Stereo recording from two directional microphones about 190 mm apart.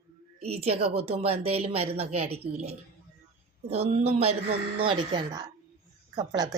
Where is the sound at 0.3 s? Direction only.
30° right (ahead or behind).